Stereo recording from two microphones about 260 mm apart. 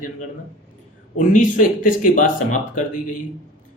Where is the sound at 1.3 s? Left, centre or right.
Left.